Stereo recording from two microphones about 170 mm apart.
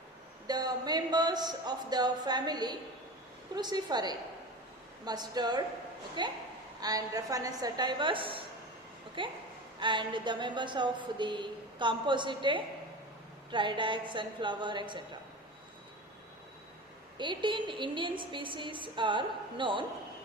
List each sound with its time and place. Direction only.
0.4 s a woman's voice: 25° right (ahead or behind)
17.2 s a woman's voice: 30° right (ahead or behind)